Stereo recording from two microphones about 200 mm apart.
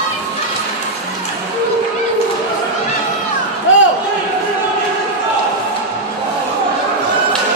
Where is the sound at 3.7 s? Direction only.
70° left (ahead or behind).